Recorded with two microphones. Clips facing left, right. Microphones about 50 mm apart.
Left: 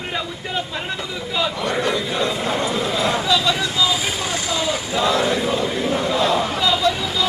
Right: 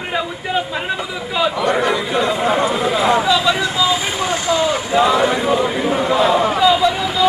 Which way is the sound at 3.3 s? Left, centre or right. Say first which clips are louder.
Right 3 dB; centre.